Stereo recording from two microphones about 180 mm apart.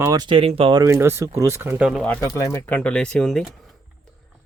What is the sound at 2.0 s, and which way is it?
Speech, 10° left (ahead or behind).